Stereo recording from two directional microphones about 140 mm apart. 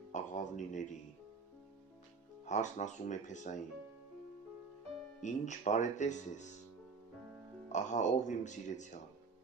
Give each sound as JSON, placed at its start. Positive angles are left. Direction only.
{"t": 0.1, "sound": "speech", "side_deg": 60}
{"t": 2.5, "sound": "speech", "side_deg": 60}
{"t": 5.2, "sound": "speech", "side_deg": 60}
{"t": 7.7, "sound": "speech", "side_deg": 60}